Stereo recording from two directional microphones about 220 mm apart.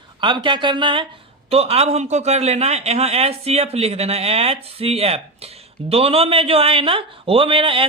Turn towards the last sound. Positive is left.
turn(degrees=-25)  # may be behind; listen again after turning